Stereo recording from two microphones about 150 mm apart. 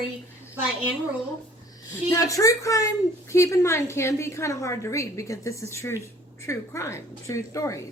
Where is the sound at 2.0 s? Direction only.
20° left (ahead or behind).